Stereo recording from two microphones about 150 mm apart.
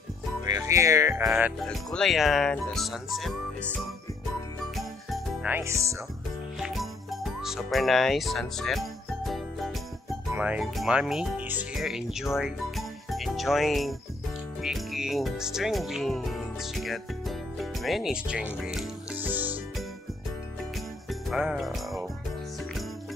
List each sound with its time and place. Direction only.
0.5 s music: 20° right (ahead or behind)
1.2 s speech: 5° right (ahead or behind)
4.7 s jingle: centre (ahead or behind)
5.5 s music: 20° right (ahead or behind)
6.6 s music: centre (ahead or behind)
10.3 s speech: 10° right (ahead or behind)
21.1 s music: 5° right (ahead or behind)